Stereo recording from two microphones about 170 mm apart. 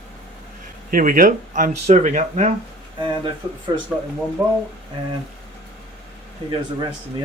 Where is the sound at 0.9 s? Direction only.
55° right (ahead or behind).